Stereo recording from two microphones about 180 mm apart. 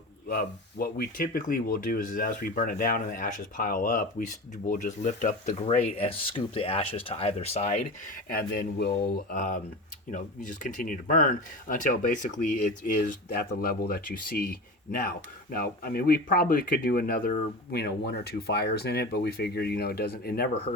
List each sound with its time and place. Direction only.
0.3 s speech: 55° left (ahead or behind); by 7.8 s 35° left (ahead or behind)
8.3 s speech: 55° left (ahead or behind)